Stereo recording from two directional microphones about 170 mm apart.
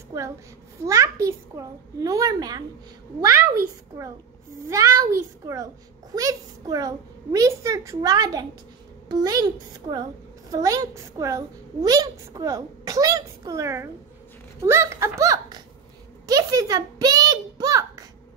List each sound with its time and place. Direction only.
0.8 s a woman's voice: 15° right (ahead or behind)